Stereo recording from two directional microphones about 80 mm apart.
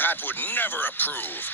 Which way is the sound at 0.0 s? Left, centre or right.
Left.